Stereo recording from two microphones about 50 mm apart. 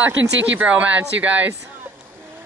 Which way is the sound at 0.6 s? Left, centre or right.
Right.